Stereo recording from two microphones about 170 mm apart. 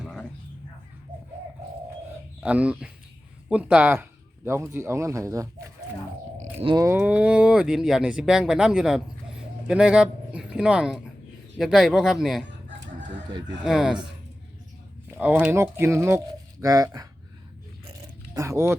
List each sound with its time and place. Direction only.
0.0 s a sound: centre (ahead or behind)
2.4 s speech: 5° right (ahead or behind)
6.4 s a sound: 35° right (ahead or behind)
6.7 s speech: 15° right (ahead or behind)
13.0 s chicken: 25° right (ahead or behind)
13.6 s speech: 5° right (ahead or behind)
15.1 s speech: 10° right (ahead or behind)
18.3 s speech: 15° right (ahead or behind)